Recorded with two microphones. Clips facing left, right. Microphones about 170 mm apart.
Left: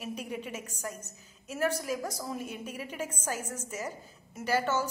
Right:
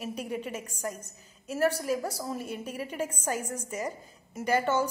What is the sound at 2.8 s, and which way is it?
Speech, 10° left (ahead or behind).